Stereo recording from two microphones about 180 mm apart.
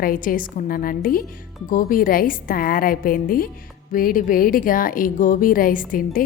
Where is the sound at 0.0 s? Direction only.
50° left (ahead or behind).